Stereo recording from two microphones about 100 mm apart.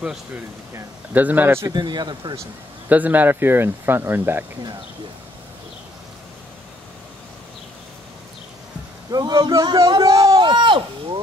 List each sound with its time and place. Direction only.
1.1 s speech: 20° right (ahead or behind)
1.7 s speech: 45° right (ahead or behind)
2.9 s speech: 15° right (ahead or behind)
9.1 s a man's voice: 45° right (ahead or behind)
10.3 s a sound: 50° right (ahead or behind)